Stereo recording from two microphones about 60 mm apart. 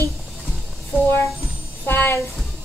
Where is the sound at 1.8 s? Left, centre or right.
Left.